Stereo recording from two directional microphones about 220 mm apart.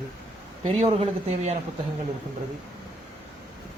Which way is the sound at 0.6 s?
30° right (ahead or behind).